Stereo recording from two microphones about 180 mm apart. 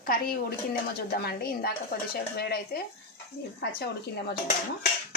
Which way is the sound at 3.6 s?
65° left (ahead or behind).